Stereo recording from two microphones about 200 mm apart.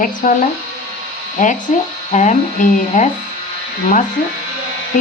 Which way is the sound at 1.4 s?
40° left (ahead or behind).